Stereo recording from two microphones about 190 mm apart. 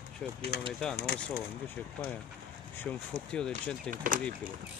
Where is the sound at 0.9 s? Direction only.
55° left (ahead or behind).